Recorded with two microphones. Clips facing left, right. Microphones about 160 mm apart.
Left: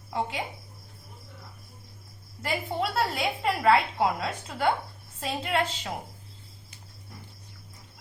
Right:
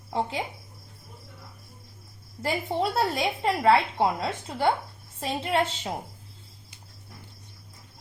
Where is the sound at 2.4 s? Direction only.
30° right (ahead or behind).